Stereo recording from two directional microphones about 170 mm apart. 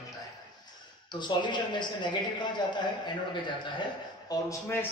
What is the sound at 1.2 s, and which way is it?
A man's voice, 25° left (ahead or behind).